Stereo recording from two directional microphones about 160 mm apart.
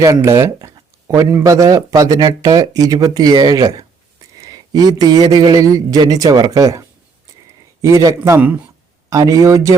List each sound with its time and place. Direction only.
0.0 s speech: 20° right (ahead or behind)